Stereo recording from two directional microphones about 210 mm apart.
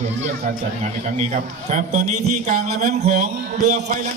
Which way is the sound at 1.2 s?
35° right (ahead or behind).